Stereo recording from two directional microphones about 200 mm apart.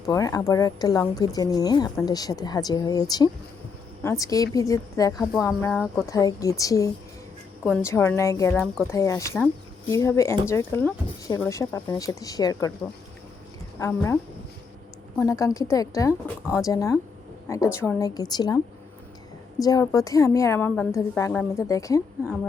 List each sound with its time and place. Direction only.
0.0 s a woman's voice: 15° left (ahead or behind)
13.7 s a woman's voice: 10° left (ahead or behind)
15.2 s a woman's voice: 15° left (ahead or behind)